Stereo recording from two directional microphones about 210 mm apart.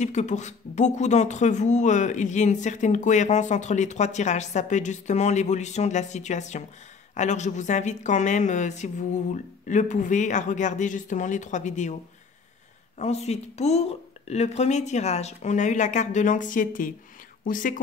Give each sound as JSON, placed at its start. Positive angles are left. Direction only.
{"t": 0.0, "sound": "speech", "side_deg": 35}
{"t": 13.0, "sound": "speech", "side_deg": 30}